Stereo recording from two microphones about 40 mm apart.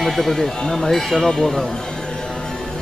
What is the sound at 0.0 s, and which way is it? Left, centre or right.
Speech, centre.